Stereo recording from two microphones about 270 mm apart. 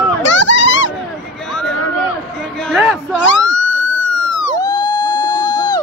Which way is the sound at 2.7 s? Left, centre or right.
Centre.